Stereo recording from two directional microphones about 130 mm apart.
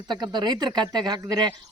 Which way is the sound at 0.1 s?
35° right (ahead or behind).